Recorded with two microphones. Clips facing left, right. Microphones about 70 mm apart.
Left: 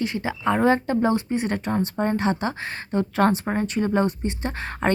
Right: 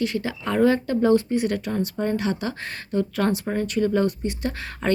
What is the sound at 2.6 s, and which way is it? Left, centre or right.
Speech, centre.